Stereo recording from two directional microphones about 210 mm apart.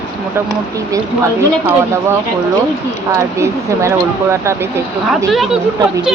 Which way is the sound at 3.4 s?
15° right (ahead or behind).